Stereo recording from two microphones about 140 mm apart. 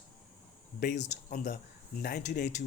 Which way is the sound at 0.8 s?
85° left.